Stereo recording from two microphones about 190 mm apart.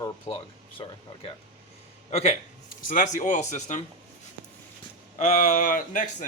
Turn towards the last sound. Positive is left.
turn(degrees=40)  # may be behind; listen again after turning